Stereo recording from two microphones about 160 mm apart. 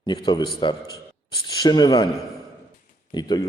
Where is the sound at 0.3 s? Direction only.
25° left (ahead or behind).